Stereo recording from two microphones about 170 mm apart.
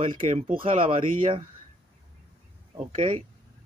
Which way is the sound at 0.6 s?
30° right (ahead or behind).